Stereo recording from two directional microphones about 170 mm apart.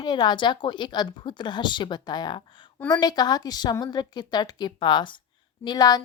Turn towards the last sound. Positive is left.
turn(degrees=25)  # may be behind; listen again after turning